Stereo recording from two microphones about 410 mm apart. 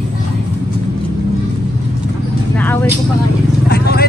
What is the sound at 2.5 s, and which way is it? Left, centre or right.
Speech, centre.